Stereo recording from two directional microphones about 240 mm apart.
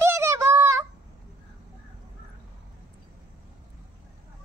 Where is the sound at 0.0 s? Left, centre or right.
Centre.